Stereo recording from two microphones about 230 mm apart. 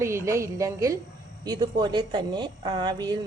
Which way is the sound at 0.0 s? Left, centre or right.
Centre.